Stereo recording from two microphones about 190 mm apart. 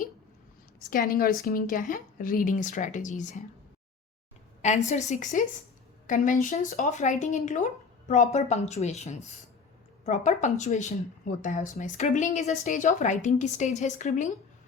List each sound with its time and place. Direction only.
0.9 s a woman's voice: 50° left (ahead or behind)
4.6 s a woman's voice: 40° left (ahead or behind)